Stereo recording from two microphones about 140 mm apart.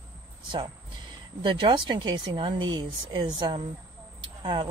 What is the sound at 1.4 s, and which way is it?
Speech, 35° right (ahead or behind).